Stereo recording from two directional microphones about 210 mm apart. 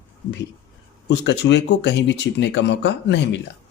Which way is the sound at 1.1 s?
55° left (ahead or behind).